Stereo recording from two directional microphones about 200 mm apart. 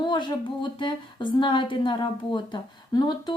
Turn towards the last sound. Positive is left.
turn(degrees=20)  # may be behind; listen again after turning